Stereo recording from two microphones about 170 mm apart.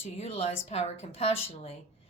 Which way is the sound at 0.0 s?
35° left (ahead or behind).